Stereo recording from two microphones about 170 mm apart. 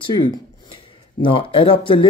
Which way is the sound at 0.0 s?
30° left (ahead or behind).